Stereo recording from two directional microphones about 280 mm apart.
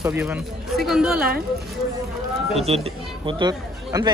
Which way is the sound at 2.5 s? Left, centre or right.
Right.